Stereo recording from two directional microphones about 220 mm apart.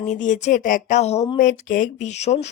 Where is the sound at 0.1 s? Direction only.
35° left (ahead or behind).